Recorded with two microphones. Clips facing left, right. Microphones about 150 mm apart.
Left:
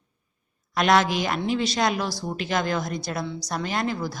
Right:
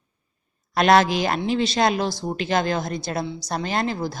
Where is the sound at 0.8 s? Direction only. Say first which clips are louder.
Right 3 dB; 30° right (ahead or behind).